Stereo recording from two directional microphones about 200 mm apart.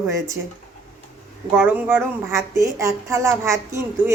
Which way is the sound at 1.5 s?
10° right (ahead or behind).